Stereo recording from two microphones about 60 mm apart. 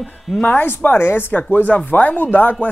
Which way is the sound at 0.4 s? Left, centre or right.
Left.